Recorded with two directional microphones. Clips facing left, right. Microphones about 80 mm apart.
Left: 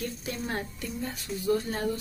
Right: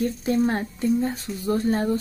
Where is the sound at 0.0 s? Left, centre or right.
Right.